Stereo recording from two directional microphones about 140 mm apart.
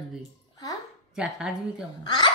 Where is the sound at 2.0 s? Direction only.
30° left (ahead or behind).